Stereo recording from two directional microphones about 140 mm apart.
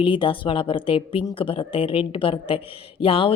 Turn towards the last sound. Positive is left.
turn(degrees=40)  # may be behind; listen again after turning